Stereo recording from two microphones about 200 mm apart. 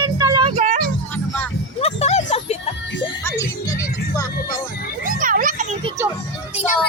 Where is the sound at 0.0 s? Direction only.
20° right (ahead or behind).